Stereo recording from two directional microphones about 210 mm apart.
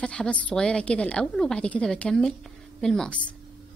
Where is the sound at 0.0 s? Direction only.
5° left (ahead or behind).